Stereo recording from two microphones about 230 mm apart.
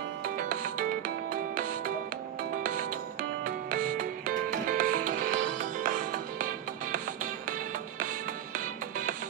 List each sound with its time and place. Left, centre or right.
0.4 s music: right